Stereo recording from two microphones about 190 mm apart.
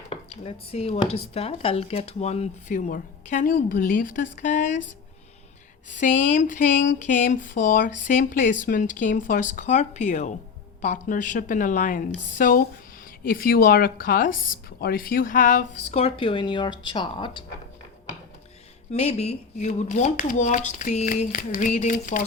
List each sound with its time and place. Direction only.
0.3 s speech: 30° left (ahead or behind)
6.0 s speech: 40° left (ahead or behind); by 17.4 s 25° left (ahead or behind)
18.9 s speech: 35° left (ahead or behind)